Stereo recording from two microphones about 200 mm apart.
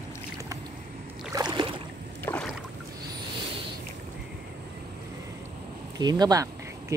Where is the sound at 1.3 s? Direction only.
20° right (ahead or behind).